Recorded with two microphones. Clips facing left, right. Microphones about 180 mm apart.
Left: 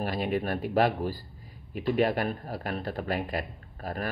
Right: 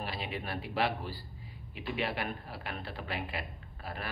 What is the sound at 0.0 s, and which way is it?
Speech, 50° left (ahead or behind).